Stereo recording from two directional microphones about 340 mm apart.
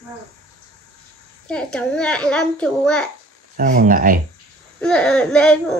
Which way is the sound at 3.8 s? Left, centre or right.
Right.